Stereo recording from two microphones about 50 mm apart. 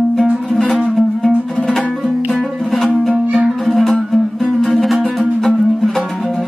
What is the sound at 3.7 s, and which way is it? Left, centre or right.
Music, centre.